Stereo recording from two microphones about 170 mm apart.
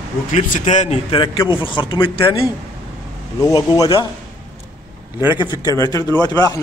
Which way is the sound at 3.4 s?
20° left (ahead or behind).